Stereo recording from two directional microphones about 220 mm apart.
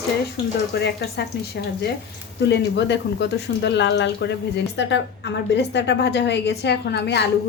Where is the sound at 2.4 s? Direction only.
50° left (ahead or behind).